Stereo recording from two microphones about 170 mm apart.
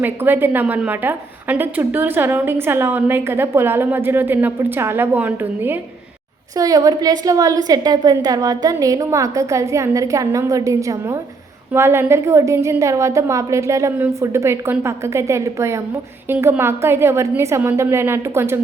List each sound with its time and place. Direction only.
0.0 s a woman's voice: 10° right (ahead or behind)
6.6 s a woman's voice: 20° right (ahead or behind)